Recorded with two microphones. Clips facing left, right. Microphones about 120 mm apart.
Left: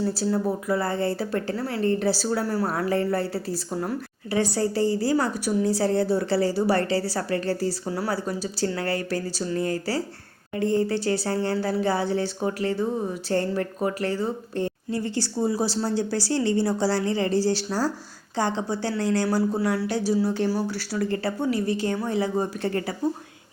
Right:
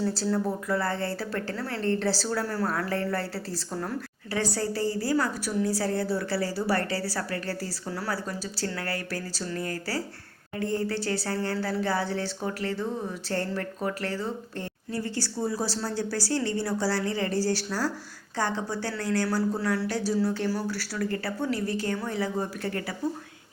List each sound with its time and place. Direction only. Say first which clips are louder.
0.0 s a woman's voice: left 3 dB; 10° left (ahead or behind); by 23.0 s 25° left (ahead or behind)